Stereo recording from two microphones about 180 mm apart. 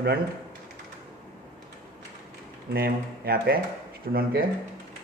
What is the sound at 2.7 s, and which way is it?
Speech, 60° right (ahead or behind).